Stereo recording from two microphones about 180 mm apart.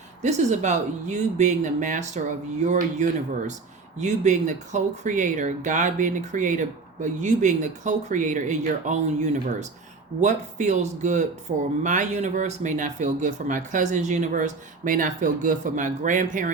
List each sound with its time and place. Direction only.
0.2 s speech: 40° right (ahead or behind)